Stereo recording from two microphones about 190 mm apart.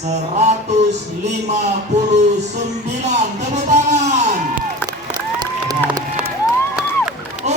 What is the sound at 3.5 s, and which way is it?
Music, 35° right (ahead or behind).